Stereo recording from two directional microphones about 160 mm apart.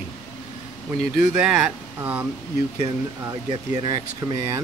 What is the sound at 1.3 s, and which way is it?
Speech, 5° right (ahead or behind).